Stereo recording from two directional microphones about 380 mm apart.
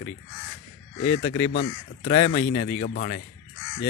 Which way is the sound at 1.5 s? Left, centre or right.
Left.